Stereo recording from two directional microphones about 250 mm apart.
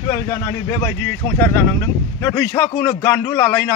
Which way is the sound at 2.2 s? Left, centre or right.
Centre.